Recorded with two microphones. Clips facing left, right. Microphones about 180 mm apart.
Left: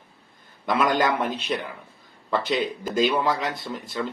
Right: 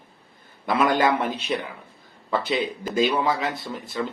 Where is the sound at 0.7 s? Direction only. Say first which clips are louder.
Right 1 dB; 10° right (ahead or behind).